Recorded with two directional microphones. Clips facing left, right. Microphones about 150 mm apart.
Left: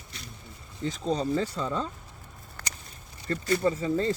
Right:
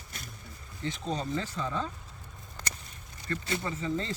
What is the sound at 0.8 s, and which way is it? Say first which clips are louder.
Speech: left 5 dB; 35° left (ahead or behind).